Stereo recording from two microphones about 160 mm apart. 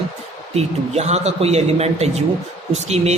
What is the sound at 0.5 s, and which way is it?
A man's voice, 40° right (ahead or behind).